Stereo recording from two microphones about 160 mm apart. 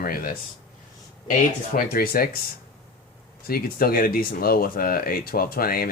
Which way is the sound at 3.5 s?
70° left (ahead or behind).